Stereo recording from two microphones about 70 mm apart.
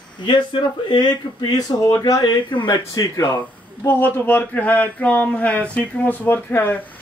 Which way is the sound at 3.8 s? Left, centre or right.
Left.